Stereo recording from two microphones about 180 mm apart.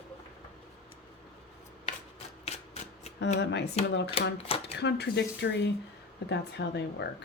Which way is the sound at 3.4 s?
70° left (ahead or behind).